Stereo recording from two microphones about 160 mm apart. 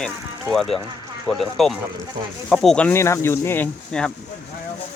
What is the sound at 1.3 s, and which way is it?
Speech, centre (ahead or behind).